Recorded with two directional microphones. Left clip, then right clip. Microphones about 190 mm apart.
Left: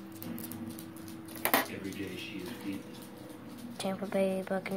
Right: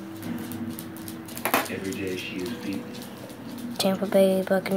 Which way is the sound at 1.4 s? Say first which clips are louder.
Right 5 dB; 45° left (ahead or behind).